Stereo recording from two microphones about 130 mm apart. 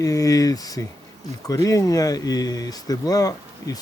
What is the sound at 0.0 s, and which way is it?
Speech, 25° left (ahead or behind).